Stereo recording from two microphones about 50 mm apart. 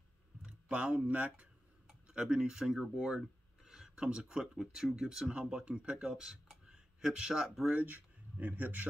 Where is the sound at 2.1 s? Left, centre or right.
Centre.